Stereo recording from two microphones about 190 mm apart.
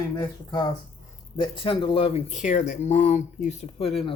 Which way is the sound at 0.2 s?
20° left (ahead or behind).